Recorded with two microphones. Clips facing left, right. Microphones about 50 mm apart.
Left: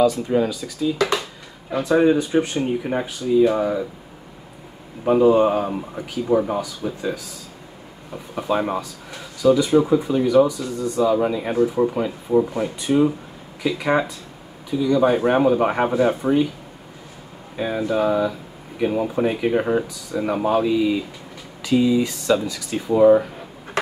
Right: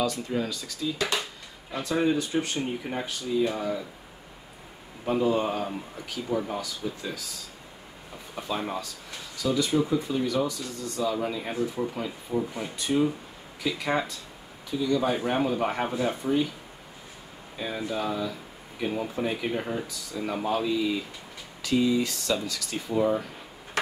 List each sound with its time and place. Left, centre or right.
0.4 s speech: centre
1.7 s speech: left
5.0 s speech: left
8.4 s speech: left
8.8 s speech: centre
11.5 s speech: left
12.8 s speech: centre
17.6 s speech: left
20.5 s speech: centre